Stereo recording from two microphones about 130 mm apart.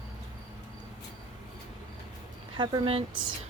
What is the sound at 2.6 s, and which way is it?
Speech, 40° right (ahead or behind).